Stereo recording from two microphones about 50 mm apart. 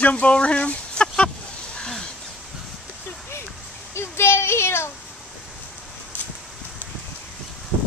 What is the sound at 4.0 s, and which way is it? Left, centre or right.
Child singing, left.